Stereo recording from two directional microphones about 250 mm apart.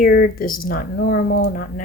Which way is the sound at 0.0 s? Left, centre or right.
Left.